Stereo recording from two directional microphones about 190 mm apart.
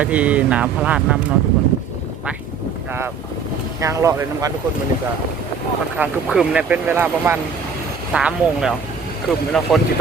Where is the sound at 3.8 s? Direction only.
15° right (ahead or behind).